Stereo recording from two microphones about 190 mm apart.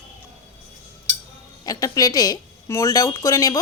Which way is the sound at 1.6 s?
20° left (ahead or behind).